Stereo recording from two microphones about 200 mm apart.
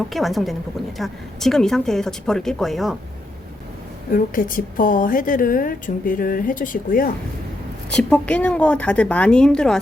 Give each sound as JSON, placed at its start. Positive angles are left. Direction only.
{"t": 0.1, "sound": "speech", "side_deg": 0}
{"t": 4.1, "sound": "a woman's voice", "side_deg": 45}
{"t": 7.9, "sound": "speech", "side_deg": 5}